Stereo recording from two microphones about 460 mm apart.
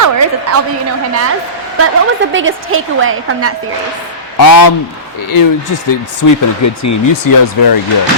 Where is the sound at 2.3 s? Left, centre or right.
Right.